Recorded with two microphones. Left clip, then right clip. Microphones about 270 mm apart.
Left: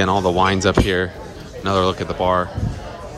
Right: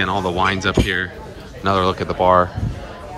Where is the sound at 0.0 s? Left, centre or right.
Centre.